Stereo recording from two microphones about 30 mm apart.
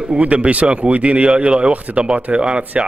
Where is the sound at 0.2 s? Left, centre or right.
Right.